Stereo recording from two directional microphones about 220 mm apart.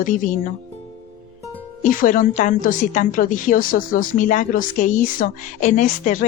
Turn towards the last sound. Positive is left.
turn(degrees=35)  # may be behind; listen again after turning